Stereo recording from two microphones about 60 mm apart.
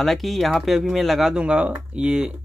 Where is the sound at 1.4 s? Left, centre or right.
Centre.